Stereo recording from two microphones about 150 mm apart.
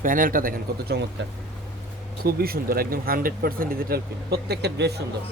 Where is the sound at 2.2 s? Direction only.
90° right.